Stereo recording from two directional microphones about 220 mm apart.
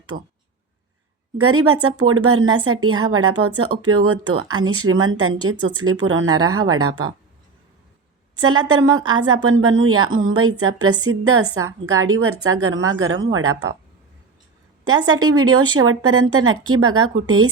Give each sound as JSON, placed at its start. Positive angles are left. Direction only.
{"t": 0.1, "sound": "speech", "side_deg": -40}
{"t": 1.4, "sound": "a woman's voice", "side_deg": -75}
{"t": 8.7, "sound": "a woman's voice", "side_deg": -70}
{"t": 15.3, "sound": "a woman's voice", "side_deg": -80}